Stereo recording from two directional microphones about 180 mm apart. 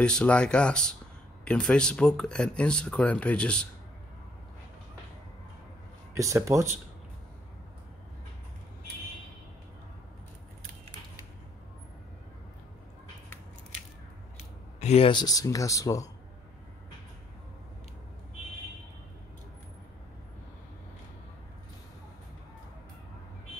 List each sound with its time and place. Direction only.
0.0 s speech: 5° left (ahead or behind)
6.1 s speech: 15° right (ahead or behind)
14.8 s speech: 35° left (ahead or behind); by 16.1 s 20° left (ahead or behind)